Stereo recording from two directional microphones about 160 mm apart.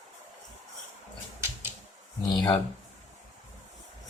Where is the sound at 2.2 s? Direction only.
25° left (ahead or behind).